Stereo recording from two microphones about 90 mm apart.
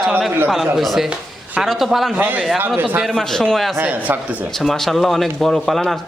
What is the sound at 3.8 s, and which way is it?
Speech, 20° right (ahead or behind).